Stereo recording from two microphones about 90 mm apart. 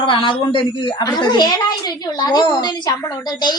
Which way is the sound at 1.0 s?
55° left (ahead or behind).